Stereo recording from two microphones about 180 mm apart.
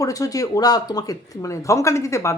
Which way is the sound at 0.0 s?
20° left (ahead or behind).